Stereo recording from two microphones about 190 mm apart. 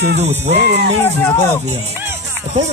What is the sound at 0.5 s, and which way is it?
Music, 60° right (ahead or behind).